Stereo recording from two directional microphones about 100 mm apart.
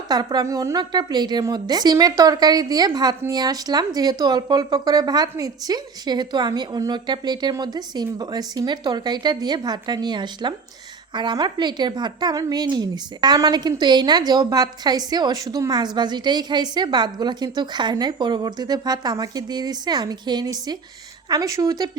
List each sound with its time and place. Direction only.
0.1 s speech: 45° right (ahead or behind)
0.4 s speech: 30° right (ahead or behind)